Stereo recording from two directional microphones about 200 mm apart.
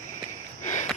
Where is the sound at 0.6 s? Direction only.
40° left (ahead or behind).